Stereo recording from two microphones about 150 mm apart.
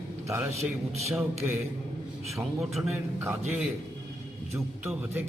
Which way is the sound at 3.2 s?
15° right (ahead or behind).